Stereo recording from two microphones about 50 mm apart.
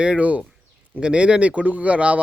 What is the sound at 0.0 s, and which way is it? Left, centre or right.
A man's voice, right.